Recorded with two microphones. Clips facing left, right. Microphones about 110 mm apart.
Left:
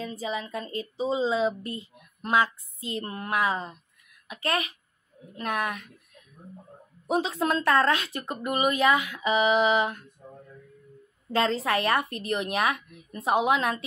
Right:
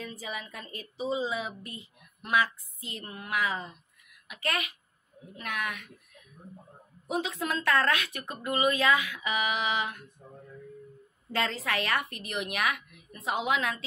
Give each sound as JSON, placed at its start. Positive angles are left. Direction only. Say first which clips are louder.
{"t": 0.0, "sound": "a woman's voice", "louder": "left 7 dB", "side_deg": 25}
{"t": 1.6, "sound": "speech", "louder": "left 8 dB", "side_deg": -20}
{"t": 2.2, "sound": "a woman's voice", "louder": "left 3 dB", "side_deg": 30}
{"t": 7.1, "sound": "a woman's voice", "louder": "left 6 dB", "side_deg": 30}
{"t": 11.3, "sound": "a woman's voice", "louder": "left 6 dB", "side_deg": 30}